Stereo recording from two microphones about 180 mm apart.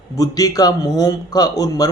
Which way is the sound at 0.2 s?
20° left (ahead or behind).